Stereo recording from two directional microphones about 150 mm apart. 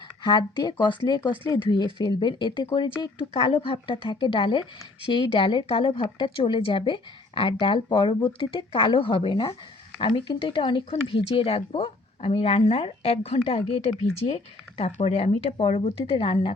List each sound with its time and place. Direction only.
0.2 s speech: 30° left (ahead or behind)